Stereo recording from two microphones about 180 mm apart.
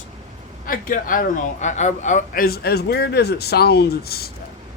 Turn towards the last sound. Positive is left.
turn(degrees=60)  # may be behind; listen again after turning